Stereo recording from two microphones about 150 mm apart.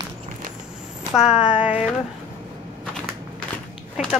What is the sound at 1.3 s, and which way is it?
Speech, 5° right (ahead or behind).